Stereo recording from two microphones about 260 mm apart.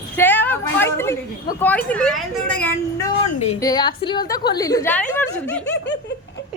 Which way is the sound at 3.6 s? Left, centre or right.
Centre.